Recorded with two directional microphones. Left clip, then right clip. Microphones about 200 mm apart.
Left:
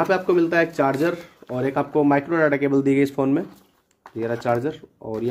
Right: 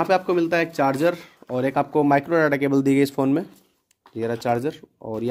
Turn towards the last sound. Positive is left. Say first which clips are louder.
# left 1 dB
turn(degrees=-45)  # may be behind; listen again after turning